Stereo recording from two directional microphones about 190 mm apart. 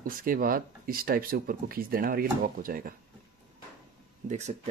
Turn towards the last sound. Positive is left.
turn(degrees=-35)  # may be behind; listen again after turning